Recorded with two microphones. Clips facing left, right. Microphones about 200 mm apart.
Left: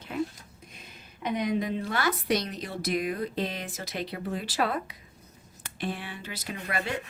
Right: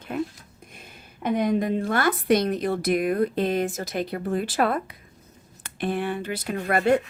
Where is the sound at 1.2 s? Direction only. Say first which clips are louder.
Right 5 dB; 50° right (ahead or behind).